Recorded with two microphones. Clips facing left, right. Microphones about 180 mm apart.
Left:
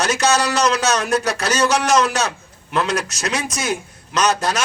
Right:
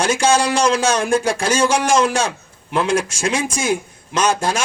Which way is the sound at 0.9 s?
30° right (ahead or behind).